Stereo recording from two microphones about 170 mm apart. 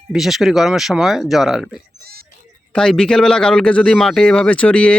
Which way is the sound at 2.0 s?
65° right (ahead or behind).